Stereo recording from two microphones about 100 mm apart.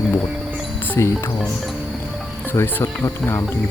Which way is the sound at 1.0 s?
30° left (ahead or behind).